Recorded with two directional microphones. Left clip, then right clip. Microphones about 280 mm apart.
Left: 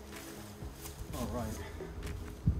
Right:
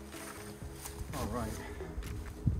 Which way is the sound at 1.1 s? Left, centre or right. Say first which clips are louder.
Right 1 dB; centre.